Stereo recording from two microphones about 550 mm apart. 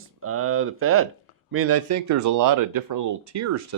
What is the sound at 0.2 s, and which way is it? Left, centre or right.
Speech, right.